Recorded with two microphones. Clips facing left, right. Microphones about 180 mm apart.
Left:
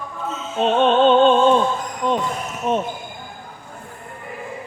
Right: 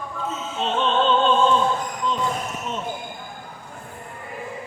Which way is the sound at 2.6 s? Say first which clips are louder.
Left 13 dB; 55° left (ahead or behind).